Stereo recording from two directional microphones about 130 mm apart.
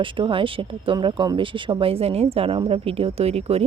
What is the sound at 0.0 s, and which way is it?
A woman's voice, 40° right (ahead or behind).